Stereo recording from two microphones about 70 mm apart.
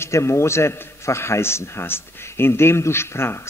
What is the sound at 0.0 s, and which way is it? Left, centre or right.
A man's voice, left.